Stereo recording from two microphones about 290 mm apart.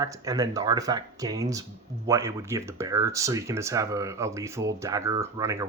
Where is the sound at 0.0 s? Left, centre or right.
Centre.